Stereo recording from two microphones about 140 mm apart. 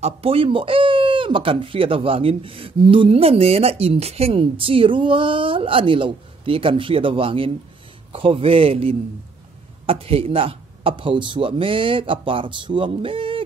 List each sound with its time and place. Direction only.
0.0 s a man's voice: 45° right (ahead or behind)